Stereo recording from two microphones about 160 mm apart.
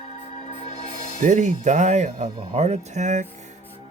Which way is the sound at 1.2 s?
55° right (ahead or behind).